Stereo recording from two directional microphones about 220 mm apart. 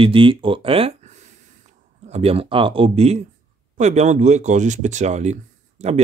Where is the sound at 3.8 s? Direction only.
30° right (ahead or behind).